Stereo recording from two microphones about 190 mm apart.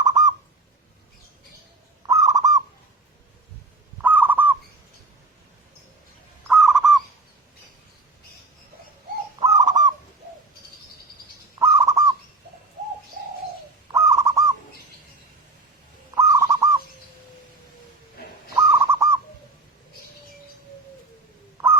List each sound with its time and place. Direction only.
0.0 s bird: 20° right (ahead or behind)
2.0 s bird: 20° right (ahead or behind)
4.0 s bird: 10° right (ahead or behind)
6.5 s owl: centre (ahead or behind)
9.4 s bird: 20° right (ahead or behind)
11.6 s bird: 15° right (ahead or behind)
13.9 s bird: 15° right (ahead or behind)
16.1 s owl: 15° right (ahead or behind)
18.5 s owl: 15° right (ahead or behind)